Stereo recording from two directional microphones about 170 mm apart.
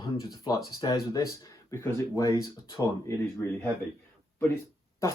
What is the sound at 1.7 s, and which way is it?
Speech, 15° left (ahead or behind).